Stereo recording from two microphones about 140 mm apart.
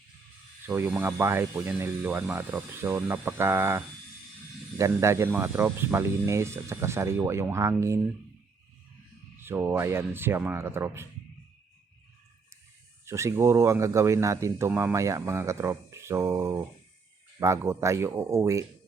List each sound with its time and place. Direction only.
0.6 s speech: 15° right (ahead or behind)
9.4 s speech: 15° right (ahead or behind)
13.1 s speech: 20° right (ahead or behind)
14.7 s speech: 10° right (ahead or behind)
14.9 s speech: 20° right (ahead or behind)